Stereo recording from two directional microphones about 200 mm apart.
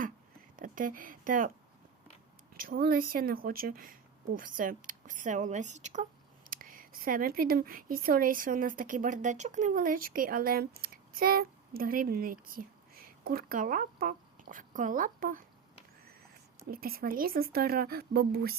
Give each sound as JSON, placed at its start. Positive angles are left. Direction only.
{"t": 0.5, "sound": "speech", "side_deg": -45}
{"t": 2.6, "sound": "speech", "side_deg": -45}
{"t": 16.6, "sound": "speech", "side_deg": -50}